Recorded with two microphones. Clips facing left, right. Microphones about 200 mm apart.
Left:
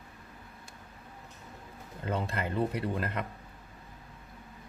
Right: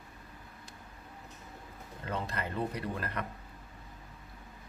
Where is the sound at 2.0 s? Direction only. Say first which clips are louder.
Left 4 dB; 30° left (ahead or behind).